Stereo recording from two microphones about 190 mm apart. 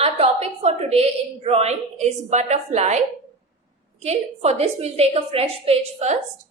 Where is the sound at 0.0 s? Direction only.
35° right (ahead or behind).